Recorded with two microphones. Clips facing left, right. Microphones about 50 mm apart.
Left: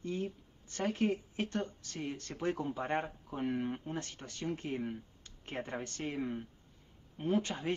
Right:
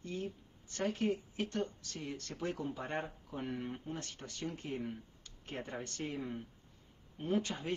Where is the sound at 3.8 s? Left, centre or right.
Left.